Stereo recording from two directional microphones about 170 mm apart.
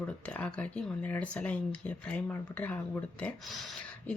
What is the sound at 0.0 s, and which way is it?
Speech, 5° left (ahead or behind).